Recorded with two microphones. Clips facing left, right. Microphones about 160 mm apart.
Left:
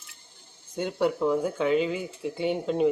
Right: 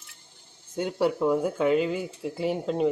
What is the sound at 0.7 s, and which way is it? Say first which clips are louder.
Speech: right 1 dB; 5° right (ahead or behind).